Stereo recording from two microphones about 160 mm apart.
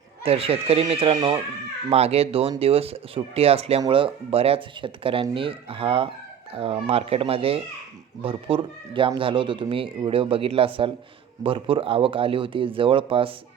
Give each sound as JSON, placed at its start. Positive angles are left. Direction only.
{"t": 0.2, "sound": "speech", "side_deg": -35}